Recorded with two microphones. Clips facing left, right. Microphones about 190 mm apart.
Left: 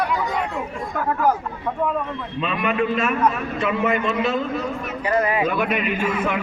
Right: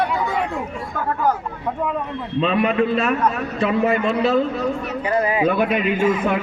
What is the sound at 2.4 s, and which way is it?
A man's voice, 30° right (ahead or behind).